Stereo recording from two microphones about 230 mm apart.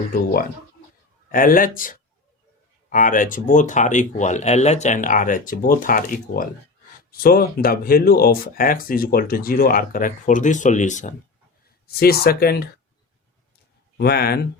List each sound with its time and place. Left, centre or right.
1.3 s speech: left
11.9 s speech: left
14.0 s speech: left